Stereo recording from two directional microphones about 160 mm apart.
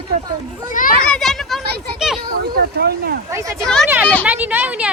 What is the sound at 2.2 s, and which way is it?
Speech, 75° right (ahead or behind).